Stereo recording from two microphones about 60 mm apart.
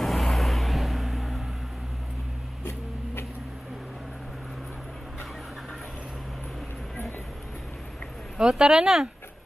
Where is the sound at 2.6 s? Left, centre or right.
Left.